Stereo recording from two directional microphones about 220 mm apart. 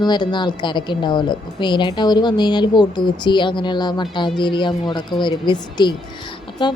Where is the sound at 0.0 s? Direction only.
20° left (ahead or behind).